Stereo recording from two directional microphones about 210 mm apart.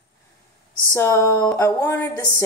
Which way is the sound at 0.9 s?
15° left (ahead or behind).